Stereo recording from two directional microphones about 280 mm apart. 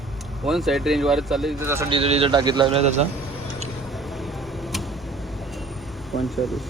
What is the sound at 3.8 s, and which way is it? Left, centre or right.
Vehicle, centre.